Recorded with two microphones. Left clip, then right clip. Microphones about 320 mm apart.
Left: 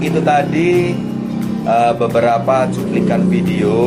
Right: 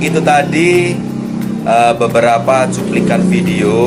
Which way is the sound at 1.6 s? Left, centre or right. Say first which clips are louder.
Right 3 dB; centre.